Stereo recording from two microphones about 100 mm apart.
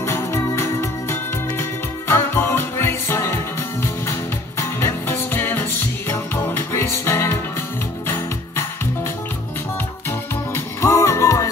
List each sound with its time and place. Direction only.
0.0 s music: 25° left (ahead or behind)
4.6 s music: 25° left (ahead or behind)
10.5 s music: 30° left (ahead or behind)